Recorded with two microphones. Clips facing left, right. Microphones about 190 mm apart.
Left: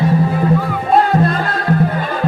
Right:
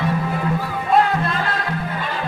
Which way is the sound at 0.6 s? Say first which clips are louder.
Left 3 dB; 40° left (ahead or behind).